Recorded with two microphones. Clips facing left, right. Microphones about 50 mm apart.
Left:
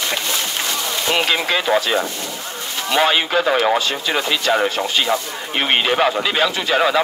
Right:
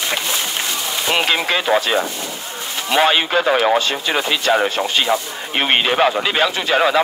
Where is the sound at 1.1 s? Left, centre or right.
Right.